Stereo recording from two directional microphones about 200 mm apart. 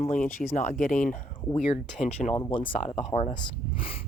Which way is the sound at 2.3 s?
20° left (ahead or behind).